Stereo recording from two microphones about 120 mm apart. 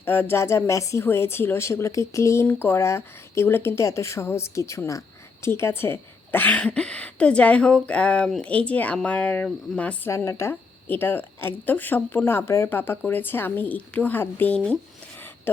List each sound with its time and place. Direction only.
0.0 s speech: 20° left (ahead or behind)
10.1 s a woman's voice: 25° left (ahead or behind)